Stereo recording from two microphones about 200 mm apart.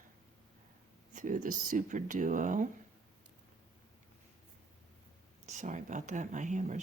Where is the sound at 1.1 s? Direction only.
40° right (ahead or behind).